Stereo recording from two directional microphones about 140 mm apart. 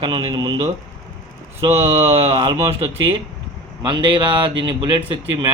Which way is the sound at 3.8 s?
35° right (ahead or behind).